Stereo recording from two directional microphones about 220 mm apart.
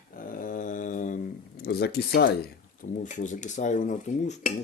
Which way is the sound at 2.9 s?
35° left (ahead or behind).